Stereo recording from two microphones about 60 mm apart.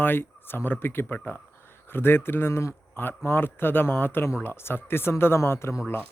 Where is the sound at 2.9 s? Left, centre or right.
Left.